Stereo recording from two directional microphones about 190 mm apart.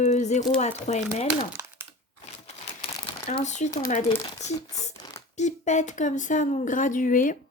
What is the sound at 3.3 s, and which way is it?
Speech, 40° left (ahead or behind).